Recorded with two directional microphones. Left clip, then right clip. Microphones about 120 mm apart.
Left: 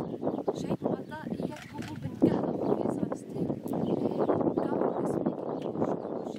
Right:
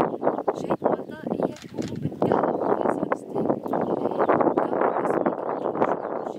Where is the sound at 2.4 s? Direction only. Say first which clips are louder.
Right 7 dB; 40° right (ahead or behind).